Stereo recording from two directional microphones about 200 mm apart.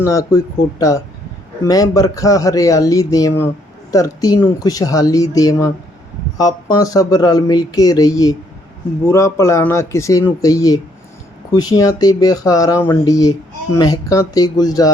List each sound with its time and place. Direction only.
0.0 s speech: 15° left (ahead or behind)